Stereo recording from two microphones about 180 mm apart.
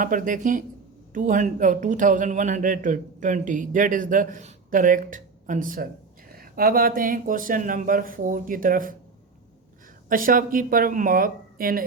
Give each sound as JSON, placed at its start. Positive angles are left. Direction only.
{"t": 0.0, "sound": "speech", "side_deg": -50}
{"t": 10.1, "sound": "speech", "side_deg": -50}